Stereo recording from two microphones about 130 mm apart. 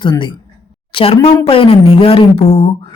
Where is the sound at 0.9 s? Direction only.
50° left (ahead or behind).